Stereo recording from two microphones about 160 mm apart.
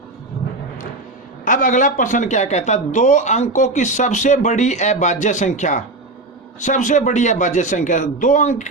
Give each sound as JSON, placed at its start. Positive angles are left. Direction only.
{"t": 1.5, "sound": "a man's voice", "side_deg": 55}